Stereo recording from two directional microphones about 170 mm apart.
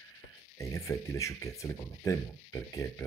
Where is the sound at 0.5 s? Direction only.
20° left (ahead or behind).